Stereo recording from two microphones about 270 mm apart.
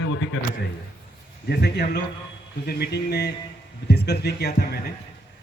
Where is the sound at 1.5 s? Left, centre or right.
Left.